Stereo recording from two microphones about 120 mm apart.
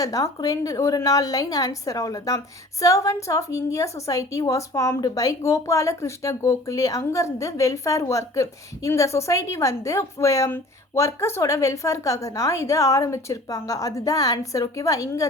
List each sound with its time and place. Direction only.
0.0 s a woman's voice: 30° left (ahead or behind)